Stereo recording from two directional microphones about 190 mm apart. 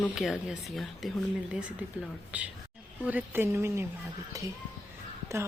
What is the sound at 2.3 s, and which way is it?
Speech, 5° right (ahead or behind).